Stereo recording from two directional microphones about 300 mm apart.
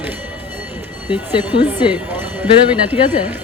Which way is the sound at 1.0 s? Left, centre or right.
Centre.